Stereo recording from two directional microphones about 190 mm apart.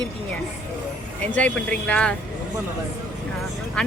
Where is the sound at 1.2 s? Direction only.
5° left (ahead or behind).